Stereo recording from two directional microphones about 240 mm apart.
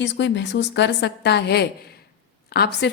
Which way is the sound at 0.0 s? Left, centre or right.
Left.